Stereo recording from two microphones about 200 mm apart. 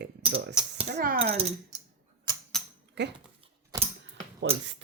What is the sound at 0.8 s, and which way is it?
Speech, 45° right (ahead or behind).